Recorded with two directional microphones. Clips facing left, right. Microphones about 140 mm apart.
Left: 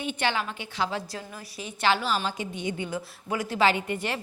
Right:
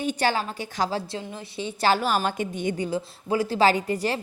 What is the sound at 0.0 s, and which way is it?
A woman's voice, 40° right (ahead or behind).